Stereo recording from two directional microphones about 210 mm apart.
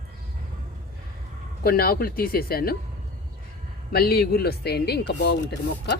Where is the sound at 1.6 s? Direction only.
45° left (ahead or behind).